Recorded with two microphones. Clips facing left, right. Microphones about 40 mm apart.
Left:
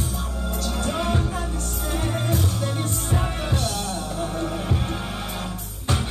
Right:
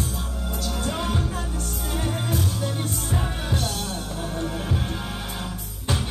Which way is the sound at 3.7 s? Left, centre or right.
Left.